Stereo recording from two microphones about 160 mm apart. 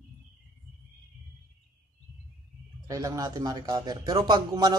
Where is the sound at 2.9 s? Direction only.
20° right (ahead or behind).